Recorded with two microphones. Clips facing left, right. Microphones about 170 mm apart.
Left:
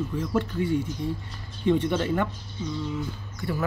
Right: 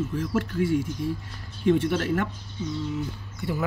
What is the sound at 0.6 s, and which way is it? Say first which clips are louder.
Speech: right 4 dB; 80° right.